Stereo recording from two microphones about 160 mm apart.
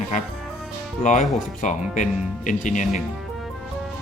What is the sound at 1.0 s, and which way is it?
Speech, 50° left (ahead or behind).